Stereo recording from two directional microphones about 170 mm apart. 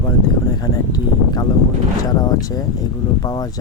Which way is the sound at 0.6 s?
25° left (ahead or behind).